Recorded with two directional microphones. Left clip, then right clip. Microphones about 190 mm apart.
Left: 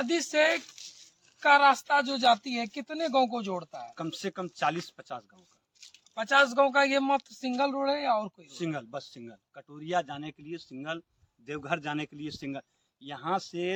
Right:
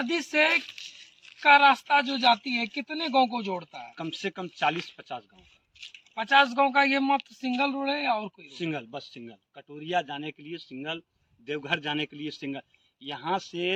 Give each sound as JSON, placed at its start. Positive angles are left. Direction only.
{"t": 0.0, "sound": "speech", "side_deg": 15}
{"t": 6.1, "sound": "speech", "side_deg": 20}
{"t": 8.4, "sound": "speech", "side_deg": 5}